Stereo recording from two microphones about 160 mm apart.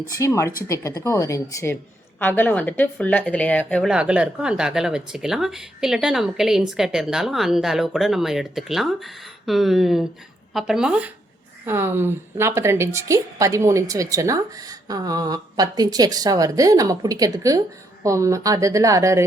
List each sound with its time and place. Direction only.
0.1 s a woman's voice: 20° left (ahead or behind)
3.8 s a woman's voice: 5° right (ahead or behind)